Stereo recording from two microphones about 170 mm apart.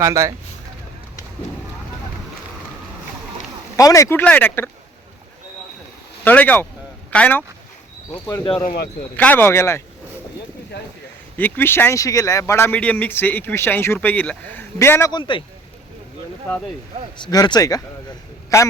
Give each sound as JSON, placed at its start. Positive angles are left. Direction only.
{"t": 0.0, "sound": "speech", "side_deg": -20}
{"t": 3.8, "sound": "speech", "side_deg": 20}
{"t": 6.2, "sound": "speech", "side_deg": 10}
{"t": 8.6, "sound": "speech", "side_deg": 65}
{"t": 9.1, "sound": "speech", "side_deg": 10}
{"t": 11.3, "sound": "speech", "side_deg": 10}
{"t": 15.1, "sound": "speech", "side_deg": 30}
{"t": 17.3, "sound": "speech", "side_deg": 25}